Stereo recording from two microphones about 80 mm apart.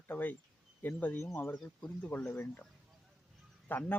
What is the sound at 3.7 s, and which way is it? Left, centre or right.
Speech, left.